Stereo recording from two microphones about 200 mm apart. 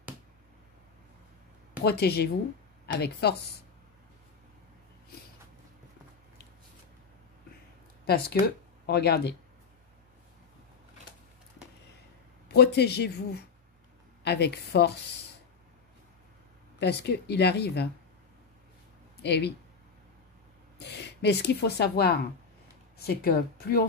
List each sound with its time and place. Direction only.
1.8 s a woman's voice: 50° left (ahead or behind)
8.1 s a woman's voice: 50° left (ahead or behind)
12.4 s speech: 55° left (ahead or behind)
16.8 s speech: 55° left (ahead or behind)
19.2 s speech: 55° left (ahead or behind)
20.7 s a woman's voice: 60° left (ahead or behind)